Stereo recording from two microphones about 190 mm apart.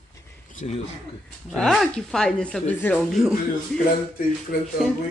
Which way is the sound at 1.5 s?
Centre (ahead or behind).